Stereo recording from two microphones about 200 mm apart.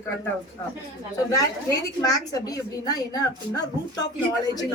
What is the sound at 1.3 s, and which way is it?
A woman's voice, 15° left (ahead or behind).